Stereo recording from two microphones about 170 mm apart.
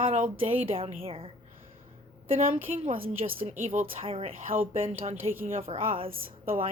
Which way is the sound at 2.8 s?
40° right (ahead or behind).